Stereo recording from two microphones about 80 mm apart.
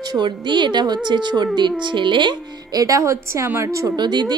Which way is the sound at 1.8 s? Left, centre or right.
Right.